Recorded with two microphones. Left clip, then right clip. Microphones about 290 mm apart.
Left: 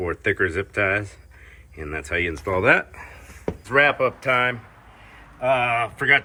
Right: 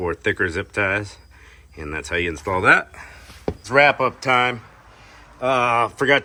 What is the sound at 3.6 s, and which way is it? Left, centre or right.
Speech, centre.